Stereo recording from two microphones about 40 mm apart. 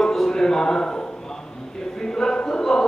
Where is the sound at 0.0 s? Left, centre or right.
Centre.